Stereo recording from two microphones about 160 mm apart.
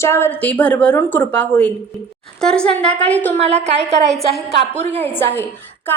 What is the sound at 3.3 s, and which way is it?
Speech, 40° right (ahead or behind).